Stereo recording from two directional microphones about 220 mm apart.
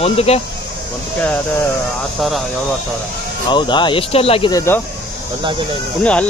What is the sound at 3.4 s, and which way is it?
Speech, 20° left (ahead or behind).